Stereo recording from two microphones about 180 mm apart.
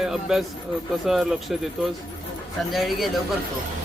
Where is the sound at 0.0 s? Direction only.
Centre (ahead or behind).